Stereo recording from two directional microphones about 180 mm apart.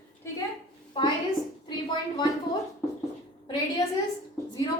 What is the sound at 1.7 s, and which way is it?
Speech, 25° left (ahead or behind).